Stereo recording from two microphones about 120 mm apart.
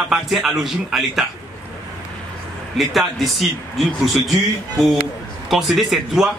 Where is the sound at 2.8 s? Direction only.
Centre (ahead or behind).